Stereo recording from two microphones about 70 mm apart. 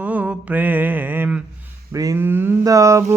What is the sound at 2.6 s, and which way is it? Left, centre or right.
Mantra, right.